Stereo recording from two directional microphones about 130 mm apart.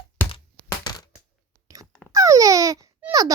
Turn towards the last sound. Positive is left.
turn(degrees=-25)  # may be behind; listen again after turning